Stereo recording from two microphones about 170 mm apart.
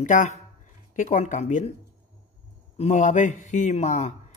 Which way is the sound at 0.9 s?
45° left (ahead or behind).